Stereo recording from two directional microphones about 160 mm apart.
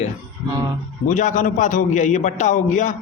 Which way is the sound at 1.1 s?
50° left (ahead or behind).